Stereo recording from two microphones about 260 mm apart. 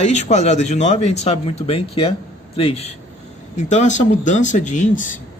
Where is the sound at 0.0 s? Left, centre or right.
Left.